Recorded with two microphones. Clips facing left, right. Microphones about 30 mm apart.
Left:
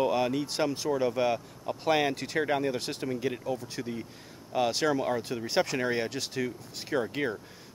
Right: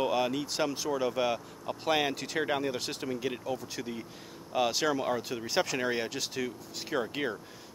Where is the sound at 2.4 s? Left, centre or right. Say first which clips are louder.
Left 2 dB; centre.